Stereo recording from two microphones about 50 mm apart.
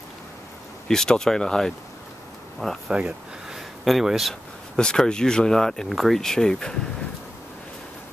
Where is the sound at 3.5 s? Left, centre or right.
Centre.